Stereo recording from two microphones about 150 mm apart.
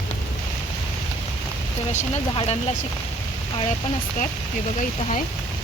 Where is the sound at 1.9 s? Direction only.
50° left (ahead or behind).